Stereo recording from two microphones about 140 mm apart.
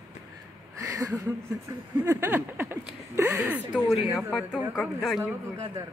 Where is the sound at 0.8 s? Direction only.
25° right (ahead or behind).